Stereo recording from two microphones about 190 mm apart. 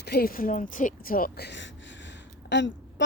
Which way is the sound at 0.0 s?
55° left (ahead or behind).